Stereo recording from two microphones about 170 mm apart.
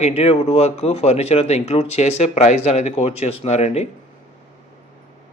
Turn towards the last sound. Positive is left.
turn(degrees=40)  # may be behind; listen again after turning